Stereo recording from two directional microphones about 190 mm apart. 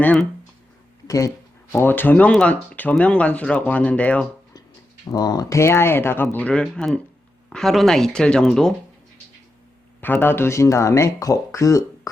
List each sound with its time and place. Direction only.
0.0 s speech: 5° left (ahead or behind)
5.0 s speech: 20° left (ahead or behind); by 8.7 s 5° left (ahead or behind)
10.0 s speech: 10° left (ahead or behind)